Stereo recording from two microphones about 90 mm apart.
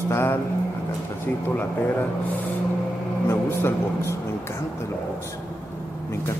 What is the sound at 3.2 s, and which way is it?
Speech, 30° left (ahead or behind).